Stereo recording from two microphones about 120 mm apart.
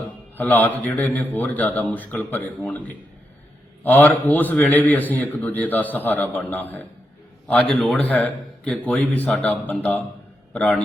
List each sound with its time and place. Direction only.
0.3 s a man's voice: 15° left (ahead or behind)